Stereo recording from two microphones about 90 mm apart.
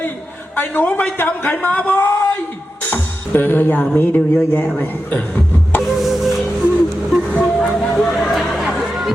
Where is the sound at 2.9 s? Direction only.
20° left (ahead or behind).